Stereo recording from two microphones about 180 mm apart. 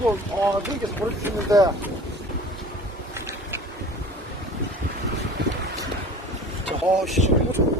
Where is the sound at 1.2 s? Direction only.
20° right (ahead or behind).